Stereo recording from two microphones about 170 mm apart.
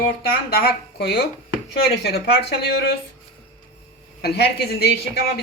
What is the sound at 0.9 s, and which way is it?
A woman's voice, 65° left (ahead or behind).